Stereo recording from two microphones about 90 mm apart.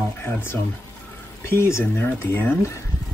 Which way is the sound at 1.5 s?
30° left (ahead or behind).